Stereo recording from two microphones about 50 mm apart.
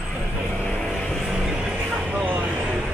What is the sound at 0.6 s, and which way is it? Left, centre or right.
Vehicle, centre.